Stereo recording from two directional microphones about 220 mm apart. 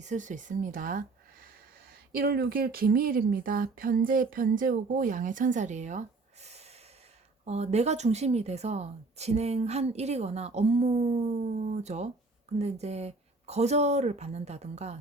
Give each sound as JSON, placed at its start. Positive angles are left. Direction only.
{"t": 0.0, "sound": "speech", "side_deg": -35}
{"t": 2.1, "sound": "a woman's voice", "side_deg": -45}